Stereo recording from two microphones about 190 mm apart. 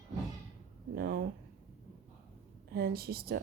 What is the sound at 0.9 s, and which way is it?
Speech, 55° right (ahead or behind).